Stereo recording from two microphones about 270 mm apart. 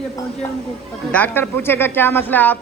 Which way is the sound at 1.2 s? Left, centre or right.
Centre.